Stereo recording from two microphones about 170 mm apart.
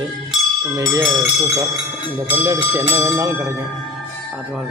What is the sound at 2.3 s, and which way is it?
A man's voice, 15° right (ahead or behind).